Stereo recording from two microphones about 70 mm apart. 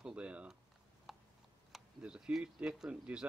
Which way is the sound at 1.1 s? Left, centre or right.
Centre.